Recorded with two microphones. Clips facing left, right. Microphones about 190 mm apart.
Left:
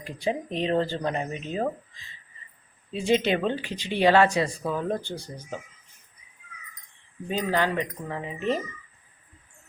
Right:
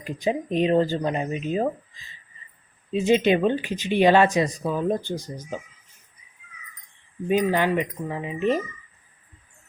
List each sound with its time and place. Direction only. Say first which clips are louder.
0.0 s speech: right 3 dB; 15° right (ahead or behind)
2.9 s speech: right 4 dB; 20° right (ahead or behind)
7.3 s speech: right 5 dB; 15° right (ahead or behind)